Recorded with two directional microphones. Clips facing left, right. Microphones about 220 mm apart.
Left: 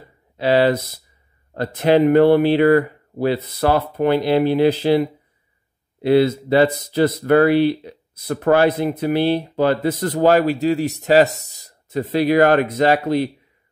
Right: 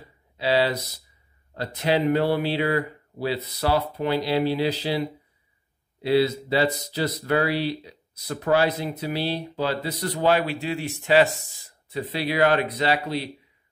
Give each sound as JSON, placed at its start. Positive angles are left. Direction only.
{"t": 0.0, "sound": "speech", "side_deg": 55}